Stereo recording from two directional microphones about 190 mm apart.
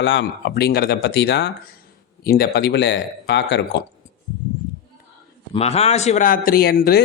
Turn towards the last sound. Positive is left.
turn(degrees=55)  # may be behind; listen again after turning